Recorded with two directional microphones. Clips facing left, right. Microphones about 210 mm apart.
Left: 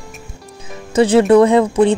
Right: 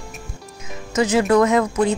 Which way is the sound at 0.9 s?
30° left (ahead or behind).